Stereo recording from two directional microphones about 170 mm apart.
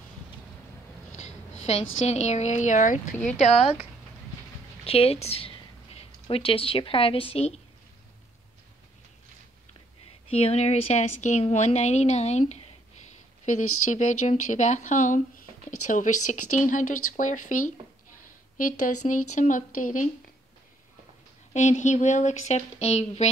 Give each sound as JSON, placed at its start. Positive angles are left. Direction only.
{"t": 1.1, "sound": "a woman's voice", "side_deg": 40}
{"t": 4.8, "sound": "a woman's voice", "side_deg": 35}
{"t": 10.2, "sound": "speech", "side_deg": 35}
{"t": 21.5, "sound": "speech", "side_deg": 45}